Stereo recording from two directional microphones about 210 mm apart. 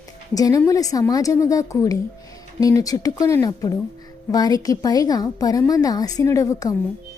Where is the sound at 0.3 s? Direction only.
15° left (ahead or behind).